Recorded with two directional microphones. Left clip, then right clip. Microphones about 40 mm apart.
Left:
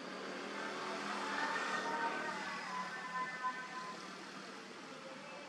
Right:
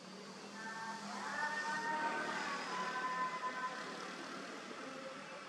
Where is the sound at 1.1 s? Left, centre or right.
Left.